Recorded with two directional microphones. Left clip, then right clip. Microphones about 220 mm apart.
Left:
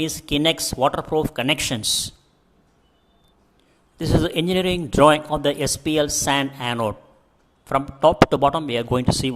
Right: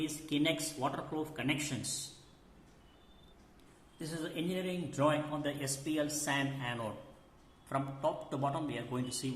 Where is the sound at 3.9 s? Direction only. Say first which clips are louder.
Left 19 dB; 45° left (ahead or behind).